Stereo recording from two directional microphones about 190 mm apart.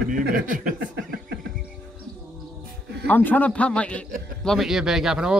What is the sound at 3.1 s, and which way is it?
A man's voice, 10° left (ahead or behind).